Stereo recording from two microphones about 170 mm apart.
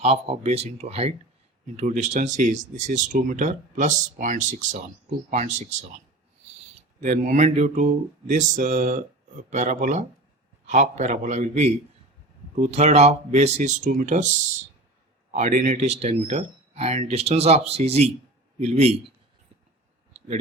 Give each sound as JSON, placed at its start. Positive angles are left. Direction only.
{"t": 0.0, "sound": "speech", "side_deg": -40}
{"t": 7.0, "sound": "speech", "side_deg": -45}
{"t": 15.3, "sound": "speech", "side_deg": -45}